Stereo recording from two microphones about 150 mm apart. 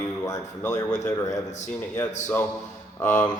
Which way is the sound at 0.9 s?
55° left (ahead or behind).